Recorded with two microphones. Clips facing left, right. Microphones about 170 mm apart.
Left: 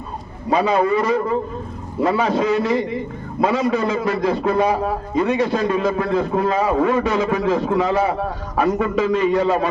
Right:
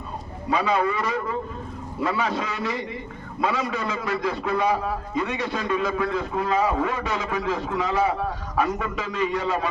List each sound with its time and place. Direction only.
0.5 s a man's voice: 40° left (ahead or behind)